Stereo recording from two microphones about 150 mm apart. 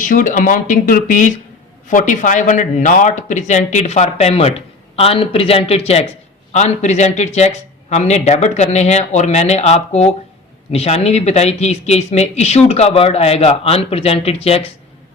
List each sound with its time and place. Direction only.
0.0 s speech: 60° left (ahead or behind); by 14.7 s 40° left (ahead or behind)